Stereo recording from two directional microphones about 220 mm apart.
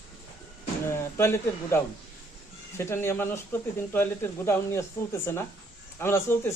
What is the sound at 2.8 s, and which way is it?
Speech, 10° left (ahead or behind).